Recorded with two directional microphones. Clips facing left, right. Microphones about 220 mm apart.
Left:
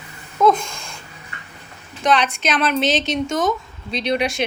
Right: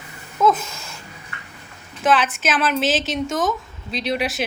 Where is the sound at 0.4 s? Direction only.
5° right (ahead or behind).